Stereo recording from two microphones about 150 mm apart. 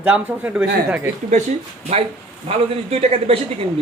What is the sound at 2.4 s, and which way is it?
A man's voice, 40° right (ahead or behind).